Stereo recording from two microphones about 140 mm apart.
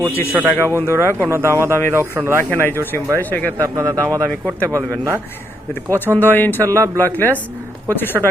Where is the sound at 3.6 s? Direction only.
25° right (ahead or behind).